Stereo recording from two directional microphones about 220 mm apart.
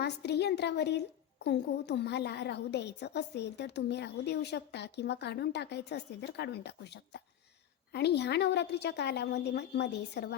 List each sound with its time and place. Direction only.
0.0 s a woman's voice: 50° left (ahead or behind)